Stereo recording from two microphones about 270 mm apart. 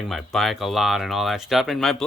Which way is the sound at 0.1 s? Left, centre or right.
Centre.